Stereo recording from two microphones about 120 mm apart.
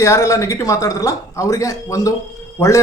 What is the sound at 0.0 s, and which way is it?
A woman's voice, 25° left (ahead or behind).